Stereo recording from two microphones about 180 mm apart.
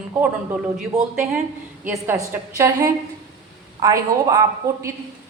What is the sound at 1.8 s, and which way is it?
A woman's voice, 15° right (ahead or behind).